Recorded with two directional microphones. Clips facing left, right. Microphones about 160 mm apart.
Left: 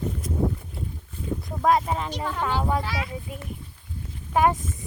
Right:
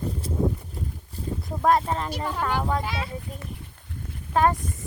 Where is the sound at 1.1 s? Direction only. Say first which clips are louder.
Even; 35° right (ahead or behind).